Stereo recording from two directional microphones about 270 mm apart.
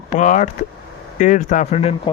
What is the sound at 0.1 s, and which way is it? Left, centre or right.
Speech, left.